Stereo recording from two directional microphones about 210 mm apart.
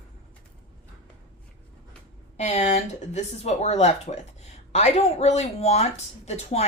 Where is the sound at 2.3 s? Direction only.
30° left (ahead or behind).